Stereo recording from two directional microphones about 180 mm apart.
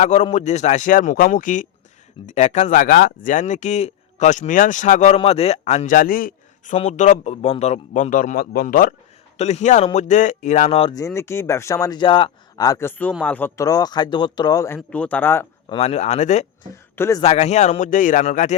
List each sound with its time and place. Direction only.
0.0 s speech: 40° left (ahead or behind)
6.7 s speech: 40° left (ahead or behind)
9.4 s speech: 40° left (ahead or behind)
10.9 s speech: 15° left (ahead or behind)
14.8 s speech: 5° left (ahead or behind)
15.7 s speech: 35° left (ahead or behind)
16.7 s speech: 15° left (ahead or behind)
17.2 s speech: 35° left (ahead or behind)